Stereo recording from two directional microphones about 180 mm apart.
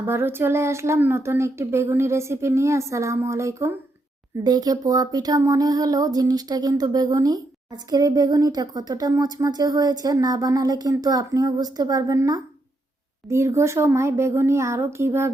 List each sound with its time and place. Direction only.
0.1 s speech: 15° right (ahead or behind)